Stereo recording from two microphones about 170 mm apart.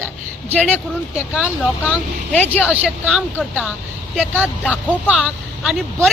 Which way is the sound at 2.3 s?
10° left (ahead or behind).